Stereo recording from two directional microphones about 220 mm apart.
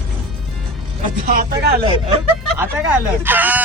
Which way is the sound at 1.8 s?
25° right (ahead or behind).